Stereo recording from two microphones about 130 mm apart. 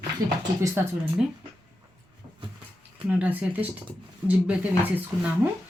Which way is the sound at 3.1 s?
10° right (ahead or behind).